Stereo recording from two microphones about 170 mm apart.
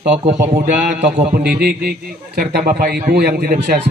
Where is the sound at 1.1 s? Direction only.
60° right (ahead or behind).